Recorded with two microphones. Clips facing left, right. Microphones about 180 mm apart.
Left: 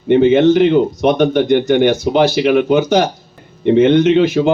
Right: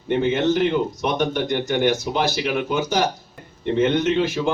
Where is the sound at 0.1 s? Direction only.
70° left (ahead or behind).